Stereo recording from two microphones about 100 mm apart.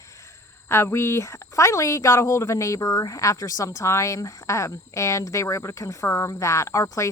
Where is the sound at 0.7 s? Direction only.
25° left (ahead or behind).